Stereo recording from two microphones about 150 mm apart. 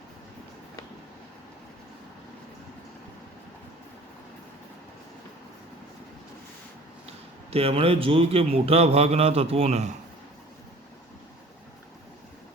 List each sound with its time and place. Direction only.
7.5 s speech: 40° right (ahead or behind)